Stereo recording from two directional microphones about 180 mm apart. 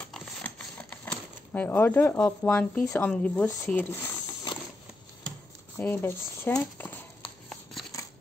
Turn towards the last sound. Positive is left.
turn(degrees=10)  # may be behind; listen again after turning